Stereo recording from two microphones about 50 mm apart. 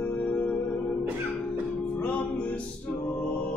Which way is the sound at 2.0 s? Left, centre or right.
Left.